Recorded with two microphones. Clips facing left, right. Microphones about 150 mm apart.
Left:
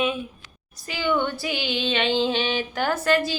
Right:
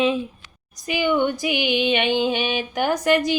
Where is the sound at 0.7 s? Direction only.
15° right (ahead or behind).